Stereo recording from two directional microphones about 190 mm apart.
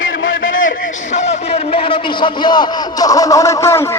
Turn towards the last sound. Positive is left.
turn(degrees=15)  # may be behind; listen again after turning